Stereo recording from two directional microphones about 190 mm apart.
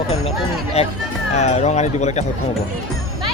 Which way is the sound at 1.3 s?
35° left (ahead or behind).